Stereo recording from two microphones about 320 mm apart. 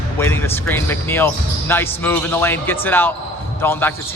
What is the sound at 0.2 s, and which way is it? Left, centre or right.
A man's voice, centre.